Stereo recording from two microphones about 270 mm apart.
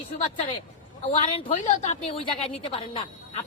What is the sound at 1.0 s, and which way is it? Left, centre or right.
A woman's voice, left.